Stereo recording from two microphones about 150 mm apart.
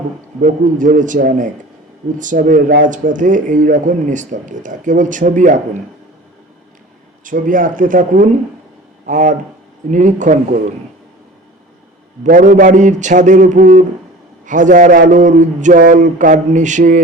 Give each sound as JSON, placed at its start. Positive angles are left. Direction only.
{"t": 0.4, "sound": "speech", "side_deg": -60}
{"t": 7.3, "sound": "speech", "side_deg": -65}
{"t": 12.2, "sound": "speech", "side_deg": -60}